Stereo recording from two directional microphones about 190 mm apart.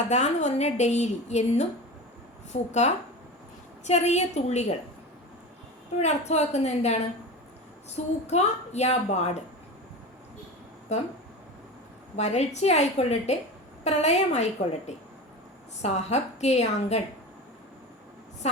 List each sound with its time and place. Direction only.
0.1 s a woman's voice: 35° left (ahead or behind)
6.0 s a woman's voice: 35° left (ahead or behind)
12.1 s a woman's voice: 35° left (ahead or behind)
18.4 s a woman's voice: 35° left (ahead or behind)